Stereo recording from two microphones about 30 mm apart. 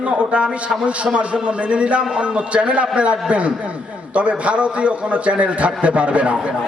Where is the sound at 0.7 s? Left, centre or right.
Centre.